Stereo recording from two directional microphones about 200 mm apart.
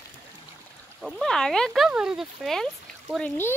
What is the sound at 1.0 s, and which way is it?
Speech, centre (ahead or behind).